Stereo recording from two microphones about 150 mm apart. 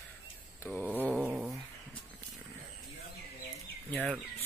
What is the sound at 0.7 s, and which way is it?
Speech, 10° left (ahead or behind).